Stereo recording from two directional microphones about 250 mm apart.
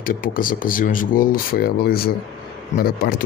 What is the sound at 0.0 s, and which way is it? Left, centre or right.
Speech, left.